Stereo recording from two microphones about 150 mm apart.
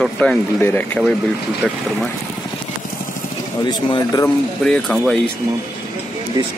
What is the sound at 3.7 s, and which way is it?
Speech, 25° left (ahead or behind).